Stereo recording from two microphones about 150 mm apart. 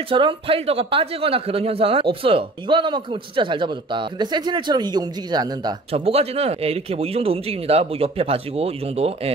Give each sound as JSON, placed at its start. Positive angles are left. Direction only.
{"t": 0.1, "sound": "speech", "side_deg": -35}
{"t": 5.9, "sound": "speech", "side_deg": -40}